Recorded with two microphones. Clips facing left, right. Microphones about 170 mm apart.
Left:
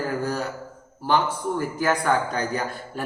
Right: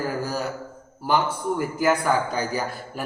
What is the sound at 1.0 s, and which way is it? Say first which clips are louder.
A man's voice: even; 10° right (ahead or behind).